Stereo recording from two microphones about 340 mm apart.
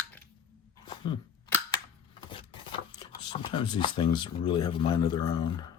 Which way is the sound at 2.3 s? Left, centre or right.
Centre.